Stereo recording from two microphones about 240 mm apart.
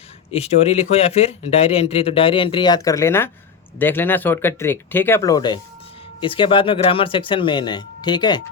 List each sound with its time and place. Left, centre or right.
0.3 s speech: left